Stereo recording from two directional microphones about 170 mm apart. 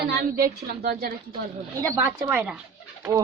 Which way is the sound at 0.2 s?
55° right (ahead or behind).